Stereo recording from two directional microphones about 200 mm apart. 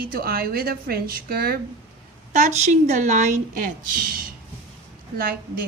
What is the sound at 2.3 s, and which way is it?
Speech, 35° right (ahead or behind).